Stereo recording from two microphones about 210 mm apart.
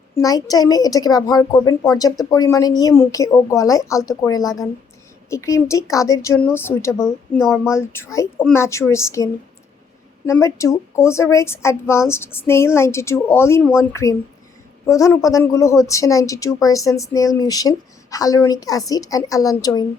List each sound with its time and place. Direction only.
0.2 s speech: 15° left (ahead or behind)